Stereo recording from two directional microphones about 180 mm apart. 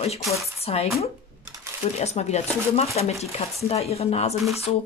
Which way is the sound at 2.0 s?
40° left (ahead or behind).